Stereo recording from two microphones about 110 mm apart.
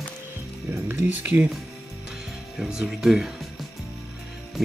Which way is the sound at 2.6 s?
5° right (ahead or behind).